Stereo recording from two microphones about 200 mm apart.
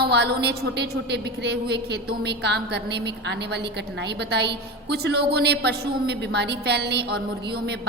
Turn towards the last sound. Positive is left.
turn(degrees=-55)  # may be behind; listen again after turning